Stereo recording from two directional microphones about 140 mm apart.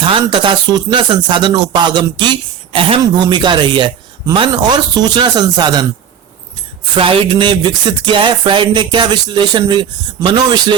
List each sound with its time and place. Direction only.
0.0 s speech: 35° right (ahead or behind)
6.9 s speech: 40° right (ahead or behind)